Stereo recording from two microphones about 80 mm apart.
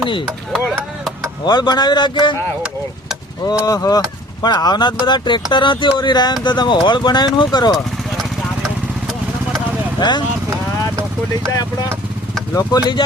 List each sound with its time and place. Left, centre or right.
1.5 s a man's voice: left
3.4 s speech: left
10.0 s speech: left
12.7 s speech: left